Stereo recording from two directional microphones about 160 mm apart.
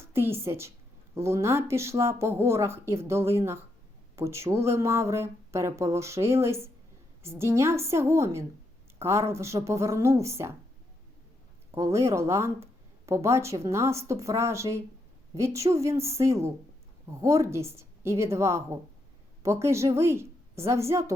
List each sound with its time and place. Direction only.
0.1 s a woman's voice: 15° right (ahead or behind)
11.7 s a woman's voice: 15° right (ahead or behind)